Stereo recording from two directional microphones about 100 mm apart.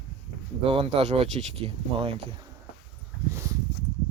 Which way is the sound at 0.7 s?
65° right (ahead or behind).